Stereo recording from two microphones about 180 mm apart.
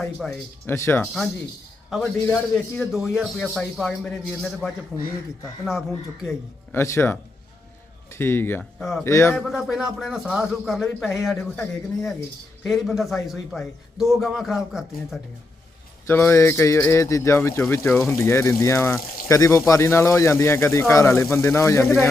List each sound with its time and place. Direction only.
0.0 s a man's voice: centre (ahead or behind)
0.7 s speech: 15° left (ahead or behind)
1.0 s a man's voice: centre (ahead or behind)
2.7 s a man's voice: centre (ahead or behind)
6.7 s speech: 15° left (ahead or behind)
8.8 s a man's voice: centre (ahead or behind)
9.0 s speech: 15° left (ahead or behind)
9.3 s a man's voice: centre (ahead or behind)
16.0 s speech: 15° left (ahead or behind)